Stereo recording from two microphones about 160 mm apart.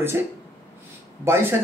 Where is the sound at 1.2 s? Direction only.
15° right (ahead or behind).